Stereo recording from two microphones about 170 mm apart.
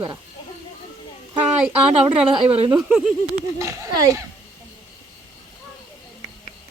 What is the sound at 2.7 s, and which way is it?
Speech, 5° right (ahead or behind).